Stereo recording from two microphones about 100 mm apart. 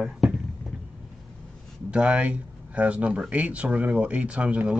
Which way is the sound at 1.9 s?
10° right (ahead or behind).